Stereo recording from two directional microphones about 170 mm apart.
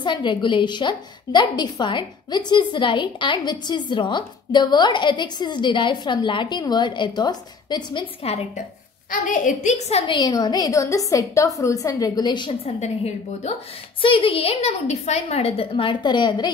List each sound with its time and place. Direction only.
0.0 s a woman's voice: 25° left (ahead or behind)
9.1 s a woman's voice: 50° left (ahead or behind); by 12.7 s 25° left (ahead or behind)
12.8 s a woman's voice: 40° left (ahead or behind)